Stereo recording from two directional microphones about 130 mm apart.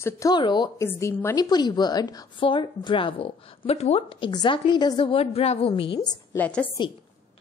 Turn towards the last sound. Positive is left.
turn(degrees=10)  # may be behind; listen again after turning